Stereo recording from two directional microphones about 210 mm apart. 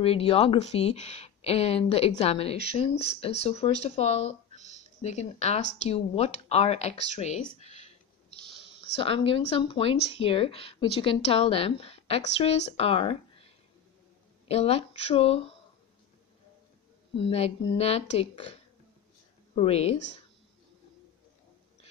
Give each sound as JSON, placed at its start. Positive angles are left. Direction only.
{"t": 0.0, "sound": "speech", "side_deg": 25}
{"t": 7.5, "sound": "a sound", "side_deg": 30}
{"t": 8.5, "sound": "a sound", "side_deg": -55}
{"t": 8.9, "sound": "speech", "side_deg": 25}
{"t": 14.5, "sound": "speech", "side_deg": 30}
{"t": 17.2, "sound": "speech", "side_deg": 25}